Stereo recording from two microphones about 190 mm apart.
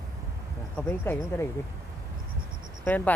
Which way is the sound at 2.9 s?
10° left (ahead or behind).